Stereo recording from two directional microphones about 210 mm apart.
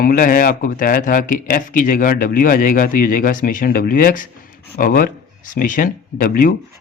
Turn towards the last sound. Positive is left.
turn(degrees=40)  # may be behind; listen again after turning